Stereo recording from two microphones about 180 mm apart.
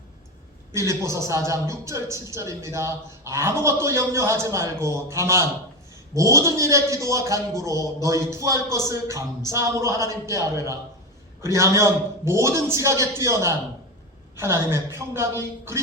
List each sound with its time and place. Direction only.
0.7 s speech: 15° right (ahead or behind)
11.4 s speech: 15° right (ahead or behind)